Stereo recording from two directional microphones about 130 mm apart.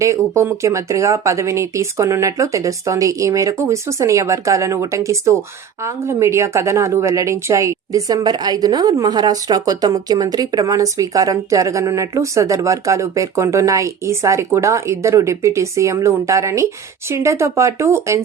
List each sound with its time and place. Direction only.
0.3 s a woman's voice: 20° right (ahead or behind)